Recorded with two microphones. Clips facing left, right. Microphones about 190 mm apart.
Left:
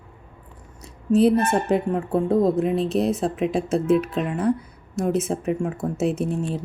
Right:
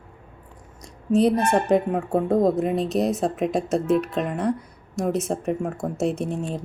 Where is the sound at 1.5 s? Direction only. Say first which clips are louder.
Right 1 dB; centre (ahead or behind).